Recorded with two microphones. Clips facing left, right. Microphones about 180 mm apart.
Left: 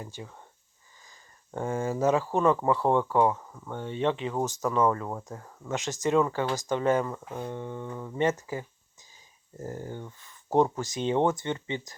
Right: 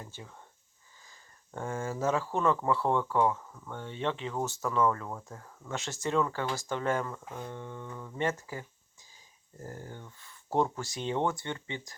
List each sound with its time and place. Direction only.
0.0 s speech: 15° left (ahead or behind)
1.5 s speech: 20° left (ahead or behind)